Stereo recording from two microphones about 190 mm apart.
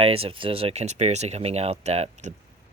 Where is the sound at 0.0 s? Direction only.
30° right (ahead or behind).